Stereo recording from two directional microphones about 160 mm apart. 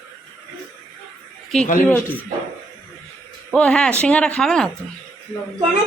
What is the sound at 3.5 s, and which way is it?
Speech, 5° left (ahead or behind).